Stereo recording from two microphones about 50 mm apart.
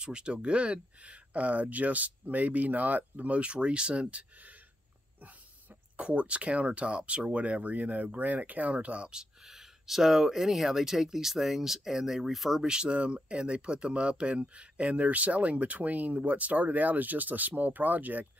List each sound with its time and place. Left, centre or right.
0.0 s speech: centre
5.9 s speech: right